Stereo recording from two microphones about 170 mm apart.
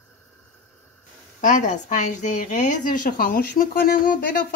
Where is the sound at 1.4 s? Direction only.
50° left (ahead or behind).